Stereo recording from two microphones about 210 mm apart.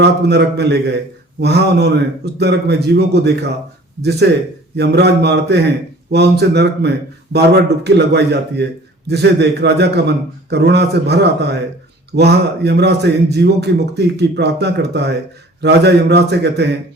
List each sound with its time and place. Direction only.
0.0 s a man's voice: 55° right (ahead or behind)
4.8 s a man's voice: 50° right (ahead or behind)